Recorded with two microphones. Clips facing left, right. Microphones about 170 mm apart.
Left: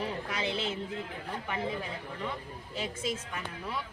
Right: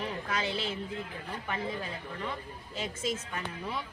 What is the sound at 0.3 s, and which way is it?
Speech, 20° left (ahead or behind).